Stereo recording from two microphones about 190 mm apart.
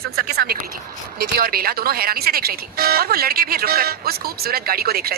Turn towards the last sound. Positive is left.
turn(degrees=-55)  # may be behind; listen again after turning